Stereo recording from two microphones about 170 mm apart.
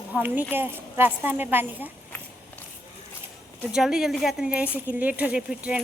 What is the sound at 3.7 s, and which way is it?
A woman's voice, 5° right (ahead or behind).